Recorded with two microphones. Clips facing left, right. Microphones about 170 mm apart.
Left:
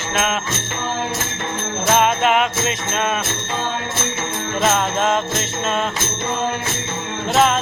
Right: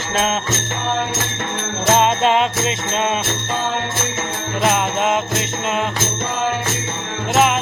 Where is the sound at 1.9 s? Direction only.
25° right (ahead or behind).